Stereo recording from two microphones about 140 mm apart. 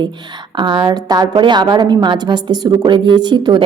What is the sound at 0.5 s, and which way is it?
Speech, 35° right (ahead or behind).